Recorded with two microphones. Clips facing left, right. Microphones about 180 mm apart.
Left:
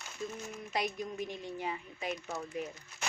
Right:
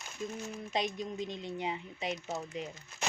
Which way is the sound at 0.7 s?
20° right (ahead or behind).